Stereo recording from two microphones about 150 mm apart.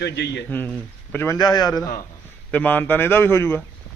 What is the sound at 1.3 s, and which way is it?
Speech, 25° left (ahead or behind).